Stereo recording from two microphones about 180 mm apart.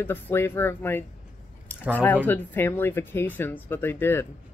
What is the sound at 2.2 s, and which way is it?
Speech, 10° left (ahead or behind).